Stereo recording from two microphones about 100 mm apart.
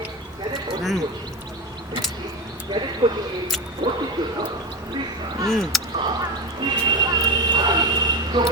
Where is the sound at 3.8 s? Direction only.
50° right (ahead or behind).